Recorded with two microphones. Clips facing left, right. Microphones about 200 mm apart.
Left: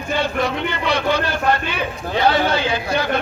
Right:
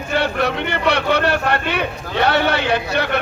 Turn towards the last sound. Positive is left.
turn(degrees=-65)  # may be behind; listen again after turning